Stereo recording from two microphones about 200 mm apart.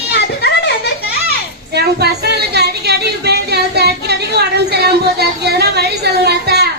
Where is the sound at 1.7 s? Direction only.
55° right (ahead or behind).